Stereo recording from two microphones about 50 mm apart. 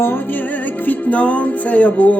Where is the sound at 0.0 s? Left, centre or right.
Left.